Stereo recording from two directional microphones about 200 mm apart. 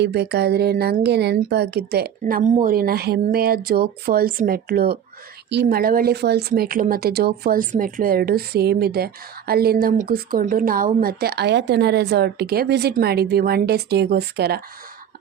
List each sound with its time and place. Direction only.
0.0 s speech: 55° right (ahead or behind)